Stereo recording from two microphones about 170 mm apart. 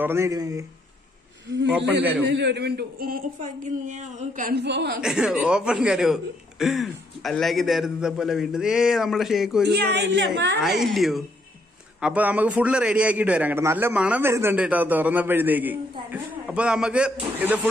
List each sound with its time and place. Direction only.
0.0 s speech: 15° right (ahead or behind)
2.2 s speech: 90° right
5.0 s a man's voice: 5° right (ahead or behind)
9.8 s a woman's voice: 85° right
10.6 s a man's voice: centre (ahead or behind)